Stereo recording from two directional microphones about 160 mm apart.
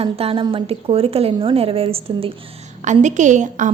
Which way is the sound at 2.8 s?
50° right (ahead or behind).